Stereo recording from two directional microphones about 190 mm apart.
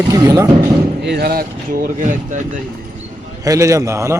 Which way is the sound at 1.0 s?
55° right (ahead or behind).